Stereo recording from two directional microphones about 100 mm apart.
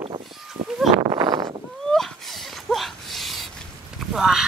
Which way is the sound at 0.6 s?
90° right.